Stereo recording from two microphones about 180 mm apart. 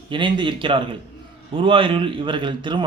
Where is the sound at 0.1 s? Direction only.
25° right (ahead or behind).